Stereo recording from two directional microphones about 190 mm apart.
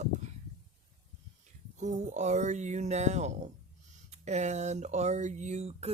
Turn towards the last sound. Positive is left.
turn(degrees=-35)  # may be behind; listen again after turning